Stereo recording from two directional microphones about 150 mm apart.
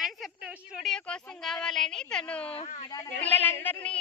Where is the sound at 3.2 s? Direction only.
10° left (ahead or behind).